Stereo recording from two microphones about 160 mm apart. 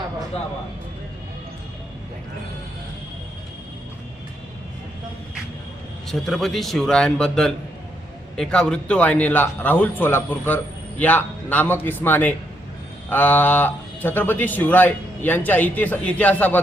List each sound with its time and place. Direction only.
6.1 s a man's voice: centre (ahead or behind)